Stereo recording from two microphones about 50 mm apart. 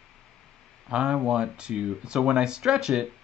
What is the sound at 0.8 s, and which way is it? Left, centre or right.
Speech, centre.